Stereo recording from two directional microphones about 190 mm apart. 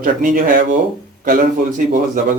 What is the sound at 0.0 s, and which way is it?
Speech, 45° right (ahead or behind).